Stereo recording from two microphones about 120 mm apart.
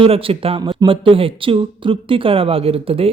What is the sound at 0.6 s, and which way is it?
Speech, 40° right (ahead or behind).